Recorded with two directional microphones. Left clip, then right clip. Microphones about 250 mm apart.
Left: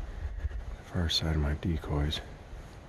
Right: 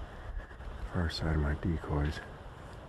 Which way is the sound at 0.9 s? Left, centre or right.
Centre.